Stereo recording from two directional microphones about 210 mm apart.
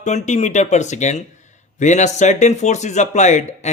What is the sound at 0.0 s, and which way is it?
Speech, 35° left (ahead or behind).